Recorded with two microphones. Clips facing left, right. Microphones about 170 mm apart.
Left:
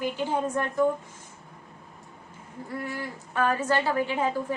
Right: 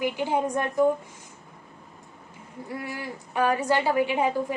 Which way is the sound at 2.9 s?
15° right (ahead or behind).